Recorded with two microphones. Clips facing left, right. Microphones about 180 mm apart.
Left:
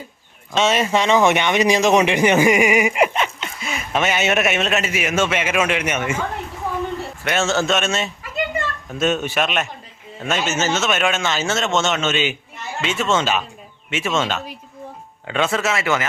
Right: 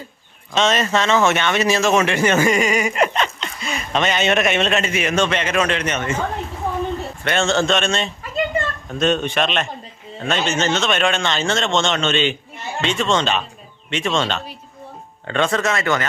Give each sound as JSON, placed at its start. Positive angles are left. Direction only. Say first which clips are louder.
{"t": 0.5, "sound": "a man's voice", "louder": "even", "side_deg": 10}
{"t": 7.3, "sound": "a man's voice", "louder": "right 1 dB", "side_deg": 5}